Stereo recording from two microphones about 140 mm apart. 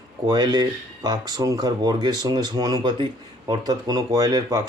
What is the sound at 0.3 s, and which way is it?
Speech, 30° right (ahead or behind).